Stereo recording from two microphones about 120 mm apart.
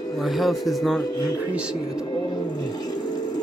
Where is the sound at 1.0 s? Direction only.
30° left (ahead or behind).